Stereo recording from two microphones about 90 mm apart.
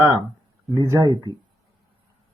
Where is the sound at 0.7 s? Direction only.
40° right (ahead or behind).